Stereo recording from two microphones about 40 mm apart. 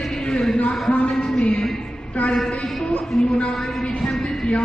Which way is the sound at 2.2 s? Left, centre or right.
Left.